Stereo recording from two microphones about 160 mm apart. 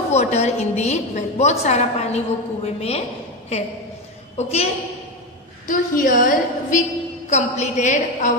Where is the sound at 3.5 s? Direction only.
40° left (ahead or behind).